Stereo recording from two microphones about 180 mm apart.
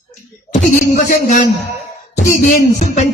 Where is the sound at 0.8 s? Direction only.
55° left (ahead or behind).